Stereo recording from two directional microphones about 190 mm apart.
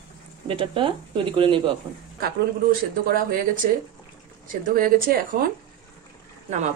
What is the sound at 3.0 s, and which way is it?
Speech, 45° right (ahead or behind).